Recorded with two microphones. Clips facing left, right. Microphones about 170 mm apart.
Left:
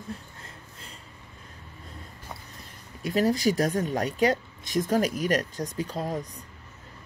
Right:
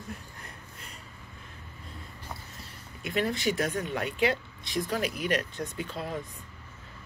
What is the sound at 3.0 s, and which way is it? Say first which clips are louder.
Speech: left 6 dB; 40° left (ahead or behind).